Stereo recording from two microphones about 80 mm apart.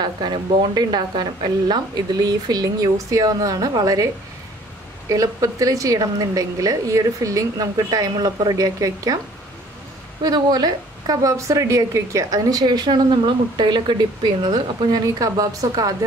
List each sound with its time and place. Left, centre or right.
0.0 s a woman's voice: right
5.1 s a woman's voice: right
10.2 s a woman's voice: right